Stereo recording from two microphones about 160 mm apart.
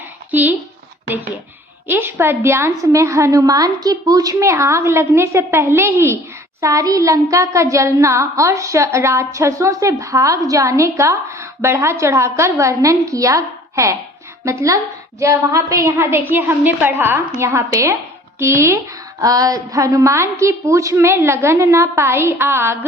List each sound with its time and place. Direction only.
0.3 s speech: 10° right (ahead or behind)
1.9 s a woman's voice: 15° right (ahead or behind)
6.6 s a sound: 20° right (ahead or behind)
15.2 s a woman's voice: 20° right (ahead or behind)